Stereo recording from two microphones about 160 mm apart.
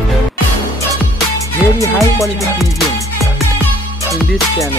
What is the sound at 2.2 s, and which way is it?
Speech, centre (ahead or behind).